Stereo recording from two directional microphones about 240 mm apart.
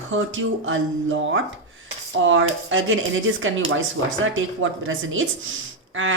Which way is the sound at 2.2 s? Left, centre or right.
Right.